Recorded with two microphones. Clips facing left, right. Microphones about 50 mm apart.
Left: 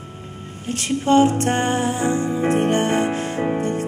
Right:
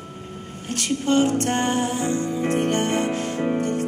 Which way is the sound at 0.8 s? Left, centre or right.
Left.